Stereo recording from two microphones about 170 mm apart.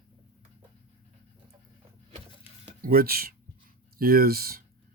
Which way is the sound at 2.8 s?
60° right (ahead or behind).